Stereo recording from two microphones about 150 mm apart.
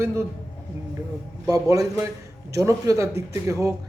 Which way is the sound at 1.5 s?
20° right (ahead or behind).